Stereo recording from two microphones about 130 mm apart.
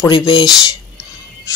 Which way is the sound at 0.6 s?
25° left (ahead or behind).